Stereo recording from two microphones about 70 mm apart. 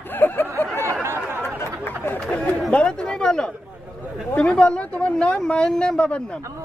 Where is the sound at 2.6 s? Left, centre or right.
Centre.